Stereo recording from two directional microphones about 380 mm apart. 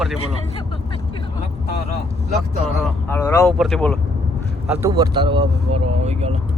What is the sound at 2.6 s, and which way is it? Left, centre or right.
Speech, centre.